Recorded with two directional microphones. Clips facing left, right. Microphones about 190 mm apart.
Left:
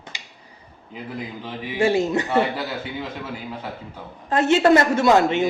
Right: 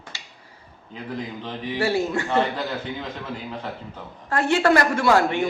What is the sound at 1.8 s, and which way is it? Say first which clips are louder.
Speech: left 4 dB; 20° left (ahead or behind).